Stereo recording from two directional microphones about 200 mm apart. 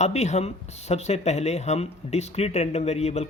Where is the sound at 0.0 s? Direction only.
35° left (ahead or behind).